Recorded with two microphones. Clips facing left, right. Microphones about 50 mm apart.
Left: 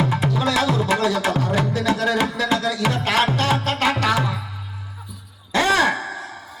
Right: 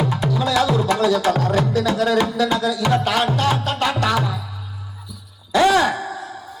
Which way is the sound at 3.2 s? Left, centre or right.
Left.